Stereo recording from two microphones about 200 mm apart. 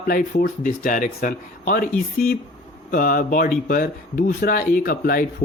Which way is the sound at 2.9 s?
45° left (ahead or behind).